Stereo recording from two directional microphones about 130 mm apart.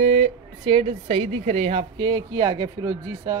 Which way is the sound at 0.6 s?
45° right (ahead or behind).